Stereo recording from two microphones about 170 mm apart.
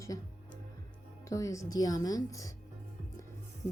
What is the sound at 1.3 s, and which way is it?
A woman's voice, 20° left (ahead or behind).